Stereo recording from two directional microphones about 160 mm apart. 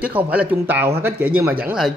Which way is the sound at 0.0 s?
10° right (ahead or behind).